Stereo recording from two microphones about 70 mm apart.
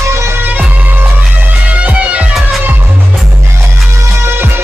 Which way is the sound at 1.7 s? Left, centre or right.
Centre.